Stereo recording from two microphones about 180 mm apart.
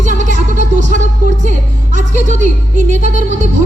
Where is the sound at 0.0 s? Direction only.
40° right (ahead or behind).